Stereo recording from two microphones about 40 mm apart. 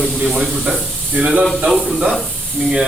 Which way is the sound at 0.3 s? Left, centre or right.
Centre.